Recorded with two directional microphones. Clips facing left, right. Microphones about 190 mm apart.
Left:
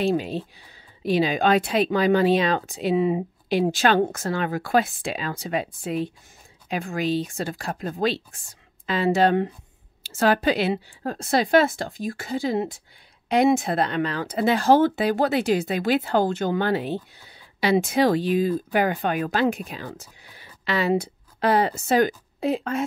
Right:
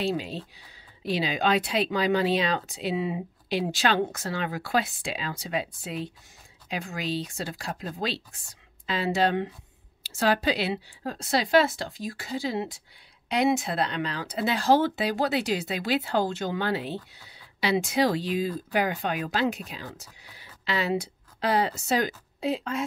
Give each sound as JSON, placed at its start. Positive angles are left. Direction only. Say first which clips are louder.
{"t": 0.0, "sound": "speech", "louder": "left 6 dB", "side_deg": 50}